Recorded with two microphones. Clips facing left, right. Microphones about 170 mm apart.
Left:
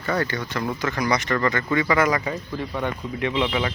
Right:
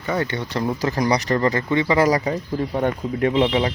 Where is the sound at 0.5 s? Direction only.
35° right (ahead or behind).